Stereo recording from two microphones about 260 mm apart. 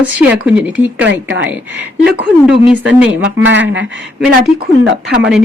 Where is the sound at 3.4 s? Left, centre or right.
Right.